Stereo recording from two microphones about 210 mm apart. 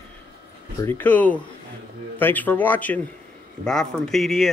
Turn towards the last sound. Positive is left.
turn(degrees=0)  # may be behind; listen again after turning